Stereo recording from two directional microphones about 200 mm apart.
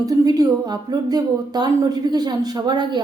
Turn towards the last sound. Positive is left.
turn(degrees=-20)  # may be behind; listen again after turning